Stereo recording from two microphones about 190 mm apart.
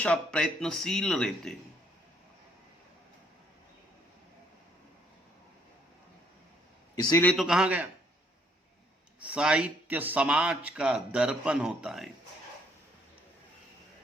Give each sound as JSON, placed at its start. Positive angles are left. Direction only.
{"t": 0.0, "sound": "a man's voice", "side_deg": 5}
{"t": 6.9, "sound": "a man's voice", "side_deg": 20}
{"t": 7.3, "sound": "a man's voice", "side_deg": -5}
{"t": 9.2, "sound": "a man's voice", "side_deg": -5}